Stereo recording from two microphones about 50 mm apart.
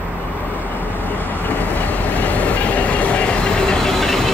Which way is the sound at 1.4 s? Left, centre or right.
Left.